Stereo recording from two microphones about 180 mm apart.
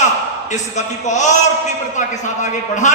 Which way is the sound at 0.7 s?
40° left (ahead or behind).